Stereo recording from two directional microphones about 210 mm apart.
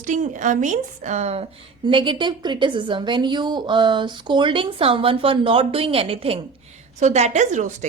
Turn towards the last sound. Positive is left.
turn(degrees=-35)  # may be behind; listen again after turning